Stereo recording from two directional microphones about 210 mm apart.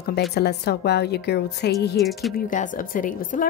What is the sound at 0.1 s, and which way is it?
A woman's voice, 50° left (ahead or behind).